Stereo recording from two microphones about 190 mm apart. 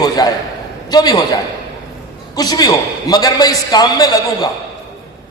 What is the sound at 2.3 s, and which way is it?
A man's voice, 20° left (ahead or behind).